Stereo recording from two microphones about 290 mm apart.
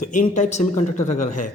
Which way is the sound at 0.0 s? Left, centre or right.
Left.